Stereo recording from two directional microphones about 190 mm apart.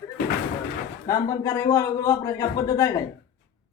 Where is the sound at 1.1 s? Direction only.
20° left (ahead or behind).